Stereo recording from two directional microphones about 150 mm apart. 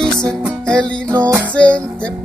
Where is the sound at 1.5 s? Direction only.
10° left (ahead or behind).